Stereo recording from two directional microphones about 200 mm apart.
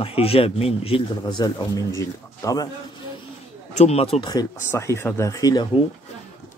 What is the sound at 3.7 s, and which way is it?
Speech, 30° left (ahead or behind).